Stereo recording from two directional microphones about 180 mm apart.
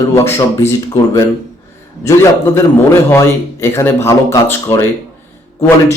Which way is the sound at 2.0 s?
15° left (ahead or behind).